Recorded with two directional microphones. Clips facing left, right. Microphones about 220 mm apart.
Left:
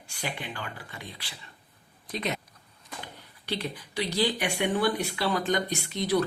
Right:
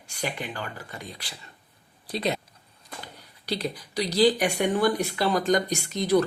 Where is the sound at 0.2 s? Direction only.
40° right (ahead or behind).